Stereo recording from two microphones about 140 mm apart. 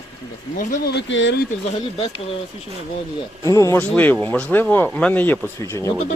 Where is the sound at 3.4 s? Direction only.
20° left (ahead or behind).